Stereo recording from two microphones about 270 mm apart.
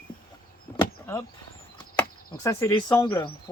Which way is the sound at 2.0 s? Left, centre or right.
Centre.